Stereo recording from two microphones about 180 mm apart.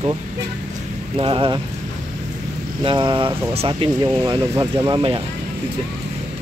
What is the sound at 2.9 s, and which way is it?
Speech, 30° right (ahead or behind).